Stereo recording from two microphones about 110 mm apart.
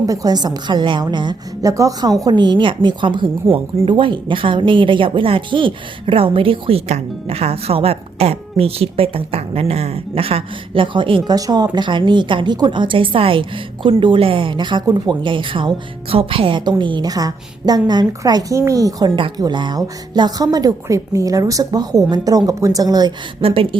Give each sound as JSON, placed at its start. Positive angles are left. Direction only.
{"t": 0.0, "sound": "speech", "side_deg": -30}
{"t": 1.7, "sound": "a woman's voice", "side_deg": -30}
{"t": 11.3, "sound": "a woman's voice", "side_deg": -35}
{"t": 23.4, "sound": "speech", "side_deg": -60}